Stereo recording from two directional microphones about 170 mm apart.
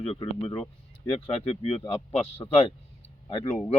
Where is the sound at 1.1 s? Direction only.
30° left (ahead or behind).